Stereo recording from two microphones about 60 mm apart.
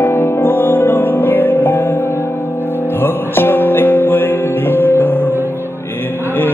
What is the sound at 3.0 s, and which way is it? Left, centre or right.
Music, left.